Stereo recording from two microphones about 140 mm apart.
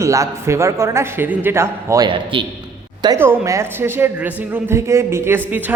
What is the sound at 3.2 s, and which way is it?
A woman's voice, 20° right (ahead or behind).